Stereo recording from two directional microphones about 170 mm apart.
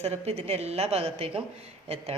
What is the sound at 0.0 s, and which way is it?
A woman's voice, 35° right (ahead or behind).